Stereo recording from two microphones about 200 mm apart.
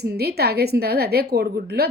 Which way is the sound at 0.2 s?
55° right (ahead or behind).